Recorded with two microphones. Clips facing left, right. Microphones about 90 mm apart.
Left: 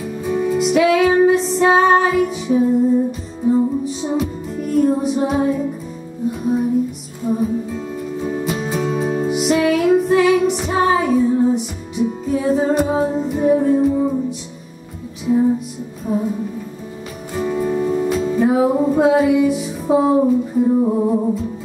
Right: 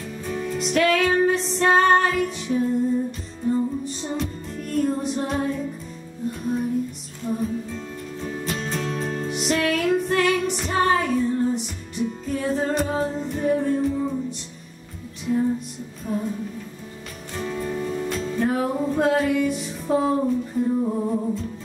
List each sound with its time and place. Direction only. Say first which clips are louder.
0.0 s music: left 9 dB; 5° left (ahead or behind)
15.2 s music: left 7 dB; 15° left (ahead or behind)
17.4 s music: left 8 dB; 10° left (ahead or behind)
20.7 s music: left 7 dB; 20° left (ahead or behind)